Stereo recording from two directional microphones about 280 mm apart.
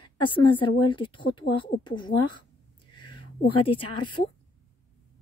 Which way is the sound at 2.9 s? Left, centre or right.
Centre.